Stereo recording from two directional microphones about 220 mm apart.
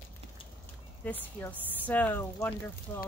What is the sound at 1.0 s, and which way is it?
Speech, 5° left (ahead or behind).